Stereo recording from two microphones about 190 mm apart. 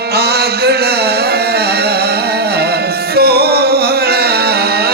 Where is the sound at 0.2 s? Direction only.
60° right (ahead or behind).